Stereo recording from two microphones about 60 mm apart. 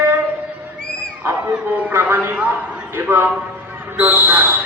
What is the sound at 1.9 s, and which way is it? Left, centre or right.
Speech, right.